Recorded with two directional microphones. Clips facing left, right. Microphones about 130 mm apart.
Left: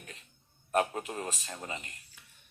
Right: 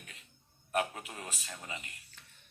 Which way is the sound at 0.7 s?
40° left (ahead or behind).